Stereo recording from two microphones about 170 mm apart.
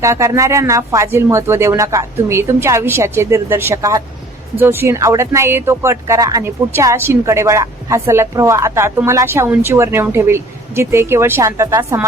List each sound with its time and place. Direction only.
0.0 s speech: 15° right (ahead or behind)